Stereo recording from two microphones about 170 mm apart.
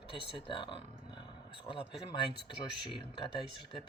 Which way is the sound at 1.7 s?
15° left (ahead or behind).